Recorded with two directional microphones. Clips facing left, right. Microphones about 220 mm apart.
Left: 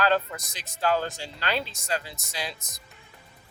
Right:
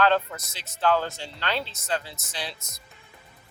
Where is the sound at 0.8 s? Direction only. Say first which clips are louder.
Right 2 dB; 40° left (ahead or behind).